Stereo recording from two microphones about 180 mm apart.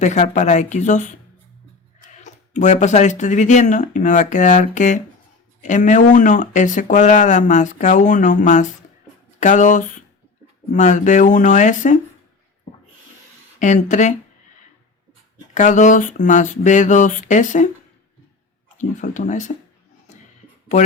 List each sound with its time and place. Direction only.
0.0 s speech: 40° left (ahead or behind)
2.2 s speech: 40° left (ahead or behind)
13.6 s speech: 45° left (ahead or behind)
15.5 s speech: 45° left (ahead or behind)
18.9 s speech: 45° left (ahead or behind)